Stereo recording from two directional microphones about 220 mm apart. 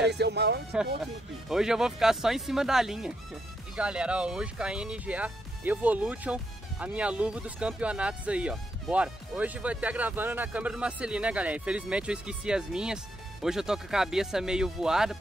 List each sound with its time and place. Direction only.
0.1 s speech: 50° right (ahead or behind)
1.5 s speech: centre (ahead or behind)